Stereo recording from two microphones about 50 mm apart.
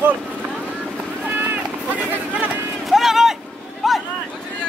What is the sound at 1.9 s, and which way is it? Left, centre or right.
Run, right.